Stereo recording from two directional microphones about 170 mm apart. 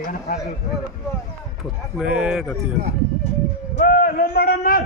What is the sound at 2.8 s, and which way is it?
Speech, 70° right (ahead or behind).